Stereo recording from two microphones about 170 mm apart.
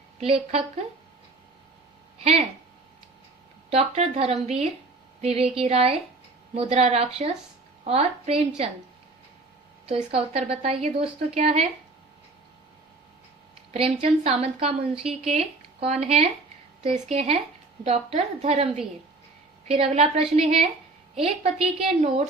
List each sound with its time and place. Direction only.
0.2 s a woman's voice: 35° right (ahead or behind)
3.7 s a woman's voice: 35° right (ahead or behind)
9.9 s a woman's voice: 35° right (ahead or behind)
13.7 s a woman's voice: 35° right (ahead or behind)